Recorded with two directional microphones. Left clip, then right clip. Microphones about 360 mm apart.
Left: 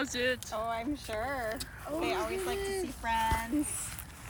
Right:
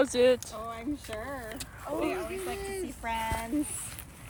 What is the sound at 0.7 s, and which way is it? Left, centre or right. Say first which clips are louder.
Speech: left 2 dB; centre.